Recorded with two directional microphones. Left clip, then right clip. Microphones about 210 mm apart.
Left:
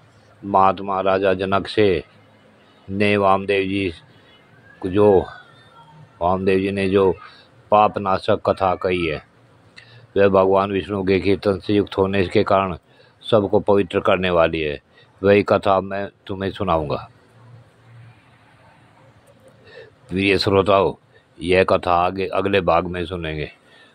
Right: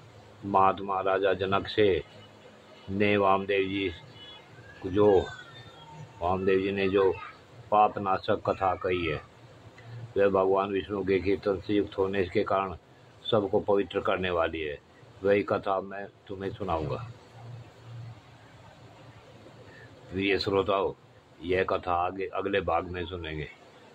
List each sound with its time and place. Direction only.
0.5 s speech: 25° left (ahead or behind)
4.9 s speech: 25° left (ahead or behind)
20.2 s speech: 30° left (ahead or behind)